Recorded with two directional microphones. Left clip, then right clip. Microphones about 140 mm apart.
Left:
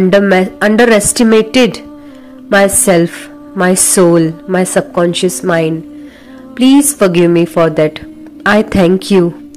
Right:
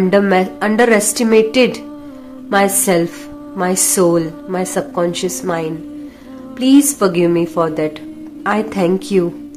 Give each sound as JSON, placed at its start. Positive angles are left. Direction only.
{"t": 0.1, "sound": "a woman's voice", "side_deg": 30}